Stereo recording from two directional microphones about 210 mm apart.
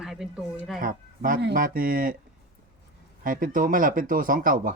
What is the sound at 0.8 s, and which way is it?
Speech, 40° right (ahead or behind).